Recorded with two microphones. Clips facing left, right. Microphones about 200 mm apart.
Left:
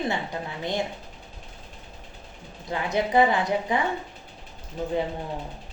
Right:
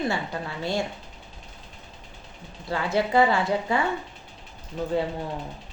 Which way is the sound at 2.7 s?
20° left (ahead or behind).